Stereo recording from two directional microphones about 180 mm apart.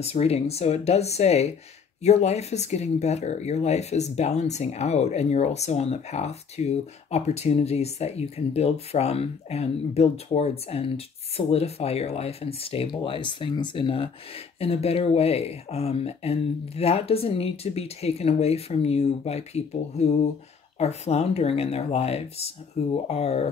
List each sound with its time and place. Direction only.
0.0 s speech: 35° left (ahead or behind)